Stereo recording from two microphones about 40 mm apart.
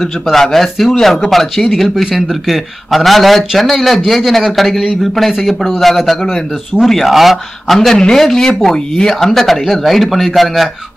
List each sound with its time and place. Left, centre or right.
0.0 s speech: centre
7.9 s speech: centre